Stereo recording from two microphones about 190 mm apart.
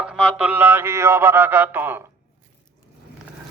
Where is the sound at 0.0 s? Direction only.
5° right (ahead or behind).